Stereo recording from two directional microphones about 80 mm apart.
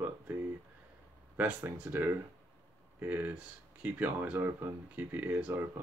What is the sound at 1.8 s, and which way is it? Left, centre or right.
Speech, right.